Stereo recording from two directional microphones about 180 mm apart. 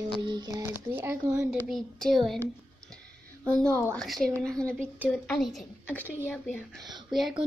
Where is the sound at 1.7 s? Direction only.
Centre (ahead or behind).